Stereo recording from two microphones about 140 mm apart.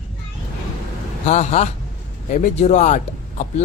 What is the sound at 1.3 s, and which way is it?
Speech, 50° left (ahead or behind).